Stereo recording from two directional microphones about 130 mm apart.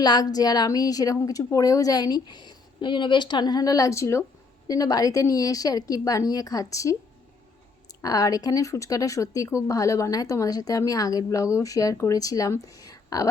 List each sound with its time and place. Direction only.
0.0 s speech: 30° left (ahead or behind)
8.0 s speech: 25° left (ahead or behind)